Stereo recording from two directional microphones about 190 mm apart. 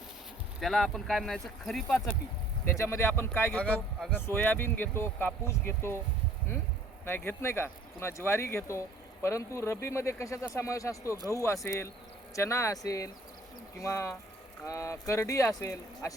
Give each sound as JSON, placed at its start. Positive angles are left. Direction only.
{"t": 0.6, "sound": "speech", "side_deg": 0}
{"t": 2.6, "sound": "speech", "side_deg": 15}
{"t": 7.0, "sound": "speech", "side_deg": 10}